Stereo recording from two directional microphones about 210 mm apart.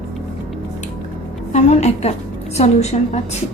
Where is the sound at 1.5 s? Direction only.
35° left (ahead or behind).